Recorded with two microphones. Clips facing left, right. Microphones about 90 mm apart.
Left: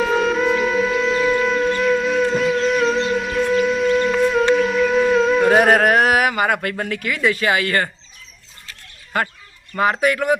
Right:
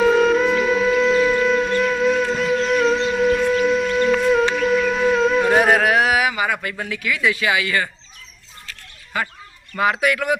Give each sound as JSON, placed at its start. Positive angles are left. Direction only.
{"t": 0.0, "sound": "wind instrument", "side_deg": 0}
{"t": 5.6, "sound": "speech", "side_deg": 45}
{"t": 9.1, "sound": "speech", "side_deg": 50}
{"t": 9.9, "sound": "a man's voice", "side_deg": 35}